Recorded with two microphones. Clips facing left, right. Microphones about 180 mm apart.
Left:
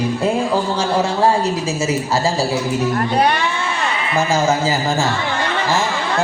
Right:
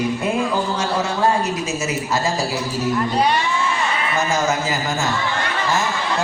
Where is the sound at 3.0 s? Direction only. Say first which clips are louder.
Even; 60° left (ahead or behind).